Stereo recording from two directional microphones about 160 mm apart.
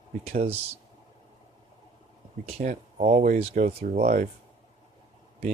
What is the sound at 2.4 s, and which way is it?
Speech, 50° right (ahead or behind).